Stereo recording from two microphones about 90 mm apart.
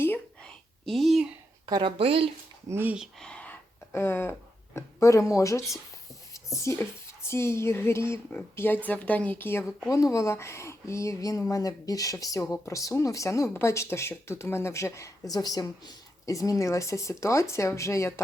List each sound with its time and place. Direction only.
0.4 s a sound: centre (ahead or behind)
1.8 s speech: 90° right
2.6 s speech: 25° right (ahead or behind)
3.2 s a sound: 10° left (ahead or behind); by 5.6 s 35° left (ahead or behind)
6.3 s speech: 35° left (ahead or behind)
9.9 s speech: 35° left (ahead or behind)